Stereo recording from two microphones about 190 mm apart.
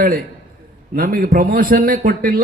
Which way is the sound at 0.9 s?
50° right (ahead or behind).